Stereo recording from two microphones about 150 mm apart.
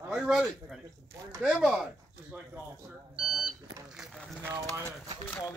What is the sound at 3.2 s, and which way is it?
Smoke detector, centre (ahead or behind).